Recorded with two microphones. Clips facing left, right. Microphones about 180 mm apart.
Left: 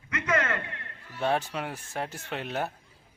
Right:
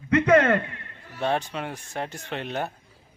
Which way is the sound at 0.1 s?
60° right (ahead or behind).